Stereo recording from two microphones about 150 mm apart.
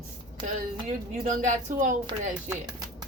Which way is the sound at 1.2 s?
60° right (ahead or behind).